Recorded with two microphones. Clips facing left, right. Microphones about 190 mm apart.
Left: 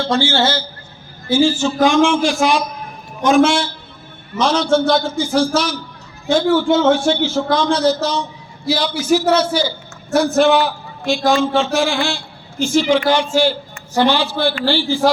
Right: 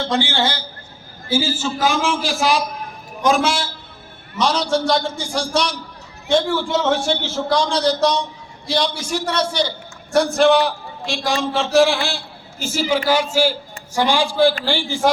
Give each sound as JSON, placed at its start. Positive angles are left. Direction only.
{"t": 0.0, "sound": "a man's voice", "side_deg": -15}